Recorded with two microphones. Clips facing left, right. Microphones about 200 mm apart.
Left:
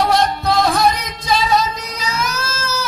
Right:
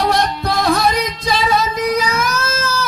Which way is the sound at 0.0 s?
55° right (ahead or behind).